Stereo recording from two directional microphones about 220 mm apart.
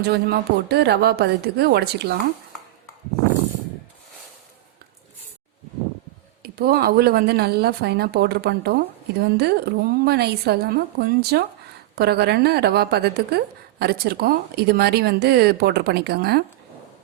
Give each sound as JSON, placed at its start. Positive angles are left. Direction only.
{"t": 0.0, "sound": "a woman's voice", "side_deg": -45}
{"t": 6.4, "sound": "a woman's voice", "side_deg": -45}